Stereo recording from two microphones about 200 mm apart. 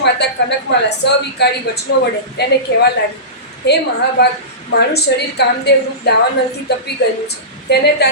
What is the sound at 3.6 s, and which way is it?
Speech, 55° left (ahead or behind).